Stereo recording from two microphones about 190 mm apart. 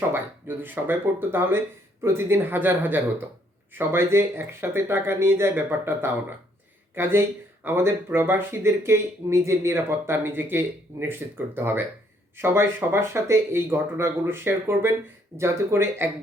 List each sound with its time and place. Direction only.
0.1 s speech: 10° right (ahead or behind)